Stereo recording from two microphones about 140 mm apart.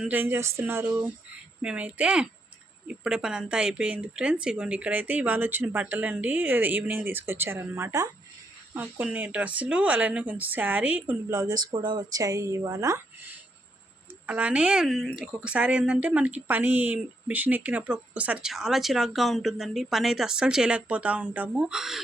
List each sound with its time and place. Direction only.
0.0 s a woman's voice: 15° right (ahead or behind)
8.7 s a woman's voice: 10° right (ahead or behind)
11.3 s speech: 25° right (ahead or behind)
14.3 s a woman's voice: 10° right (ahead or behind)